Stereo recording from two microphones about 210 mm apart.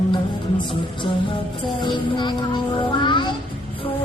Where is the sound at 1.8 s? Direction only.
20° left (ahead or behind).